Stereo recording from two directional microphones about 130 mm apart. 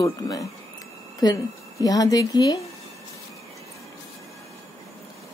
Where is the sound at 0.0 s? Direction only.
25° left (ahead or behind).